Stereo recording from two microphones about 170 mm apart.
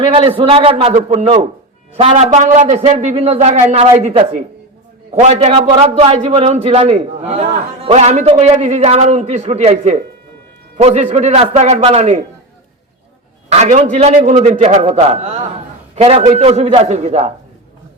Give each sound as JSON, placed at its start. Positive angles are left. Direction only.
{"t": 0.1, "sound": "a man's voice", "side_deg": -30}
{"t": 5.5, "sound": "a man's voice", "side_deg": -25}
{"t": 13.5, "sound": "a man's voice", "side_deg": -40}